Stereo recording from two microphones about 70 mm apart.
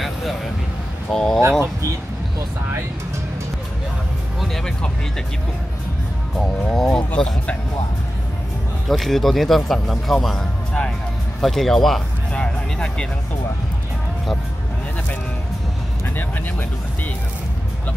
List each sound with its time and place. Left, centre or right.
0.0 s a sound: centre
1.1 s speech: centre
4.4 s speech: centre
6.3 s a man's voice: centre
8.8 s a man's voice: centre